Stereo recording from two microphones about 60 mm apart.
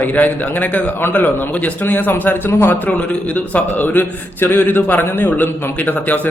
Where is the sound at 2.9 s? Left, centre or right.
Left.